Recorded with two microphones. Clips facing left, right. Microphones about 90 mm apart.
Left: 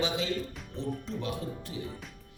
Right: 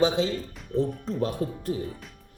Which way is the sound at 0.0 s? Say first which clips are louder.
Right 7 dB; 35° right (ahead or behind).